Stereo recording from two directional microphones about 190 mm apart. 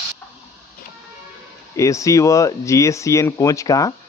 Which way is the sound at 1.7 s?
15° left (ahead or behind).